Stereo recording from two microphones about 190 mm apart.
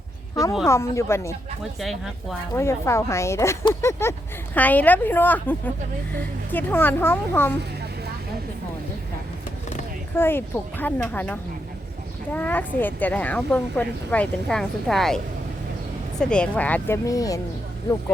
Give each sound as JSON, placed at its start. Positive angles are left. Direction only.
{"t": 0.6, "sound": "speech", "side_deg": 15}
{"t": 1.8, "sound": "speech", "side_deg": 0}
{"t": 2.6, "sound": "speech", "side_deg": 15}
{"t": 10.2, "sound": "speech", "side_deg": 10}